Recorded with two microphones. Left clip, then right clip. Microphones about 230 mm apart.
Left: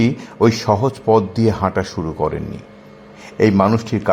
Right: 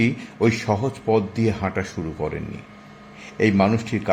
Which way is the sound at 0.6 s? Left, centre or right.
Centre.